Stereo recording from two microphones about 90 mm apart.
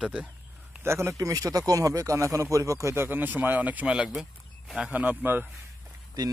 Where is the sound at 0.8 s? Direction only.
30° right (ahead or behind); by 4.1 s 15° right (ahead or behind).